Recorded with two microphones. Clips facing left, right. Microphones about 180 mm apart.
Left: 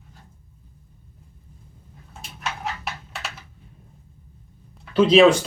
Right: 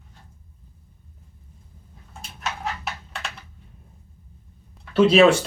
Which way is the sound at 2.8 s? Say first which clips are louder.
Even; 5° left (ahead or behind).